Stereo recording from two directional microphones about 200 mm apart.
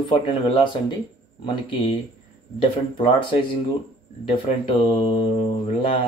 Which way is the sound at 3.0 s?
25° left (ahead or behind).